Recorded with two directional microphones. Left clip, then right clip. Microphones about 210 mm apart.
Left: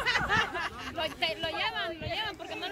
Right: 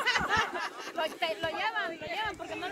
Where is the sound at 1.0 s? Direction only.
30° right (ahead or behind).